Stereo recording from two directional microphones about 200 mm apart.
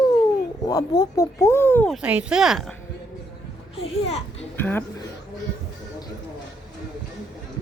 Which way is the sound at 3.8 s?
30° left (ahead or behind).